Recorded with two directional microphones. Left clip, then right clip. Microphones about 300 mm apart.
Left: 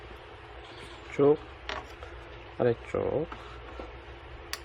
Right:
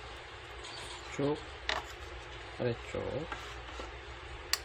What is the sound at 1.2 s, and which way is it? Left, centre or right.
Speech, centre.